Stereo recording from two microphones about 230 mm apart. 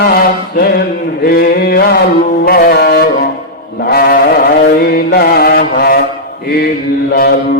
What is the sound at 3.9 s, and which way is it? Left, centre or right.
Chant, left.